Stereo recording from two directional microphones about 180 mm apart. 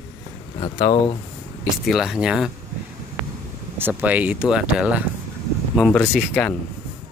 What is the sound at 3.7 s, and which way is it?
Speech, 10° right (ahead or behind).